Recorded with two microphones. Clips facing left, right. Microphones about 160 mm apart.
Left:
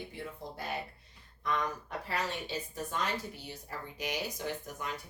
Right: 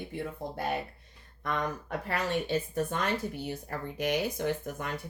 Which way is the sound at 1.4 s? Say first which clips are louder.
Right 2 dB; 55° right (ahead or behind).